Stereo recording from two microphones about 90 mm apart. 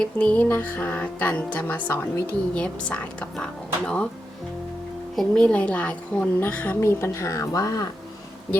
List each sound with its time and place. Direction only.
0.0 s a woman's voice: 10° left (ahead or behind)
5.1 s a woman's voice: 10° left (ahead or behind)
6.7 s a woman's voice: 30° left (ahead or behind)